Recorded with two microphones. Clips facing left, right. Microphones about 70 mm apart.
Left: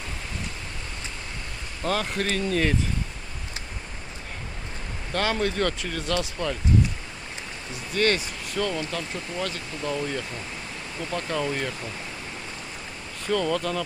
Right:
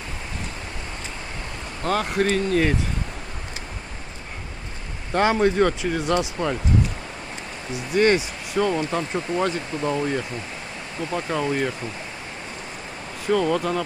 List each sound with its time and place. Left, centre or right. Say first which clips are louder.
1.9 s speech: right 5 dB; centre
5.1 s speech: right 6 dB; right
7.9 s speech: right 5 dB; centre
13.3 s speech: right 4 dB; centre